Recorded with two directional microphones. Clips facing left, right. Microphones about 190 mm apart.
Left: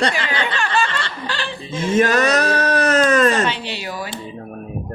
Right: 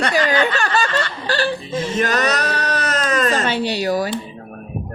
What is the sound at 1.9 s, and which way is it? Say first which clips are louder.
Speech: left 5 dB; 50° left (ahead or behind).